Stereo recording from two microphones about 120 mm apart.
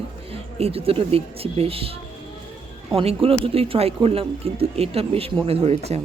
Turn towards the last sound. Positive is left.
turn(degrees=-60)  # may be behind; listen again after turning